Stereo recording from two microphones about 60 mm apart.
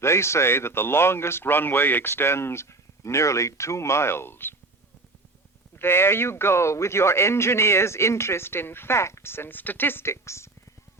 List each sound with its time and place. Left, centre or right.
0.0 s a man's voice: left
5.7 s a man's voice: left